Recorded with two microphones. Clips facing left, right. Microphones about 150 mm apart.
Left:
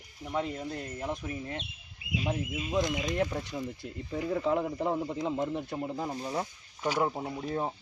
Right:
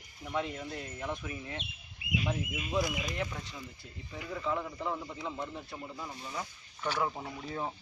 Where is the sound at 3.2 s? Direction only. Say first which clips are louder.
Left 7 dB; 40° left (ahead or behind).